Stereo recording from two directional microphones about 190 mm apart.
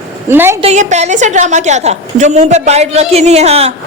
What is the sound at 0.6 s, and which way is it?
A woman's voice, 35° right (ahead or behind).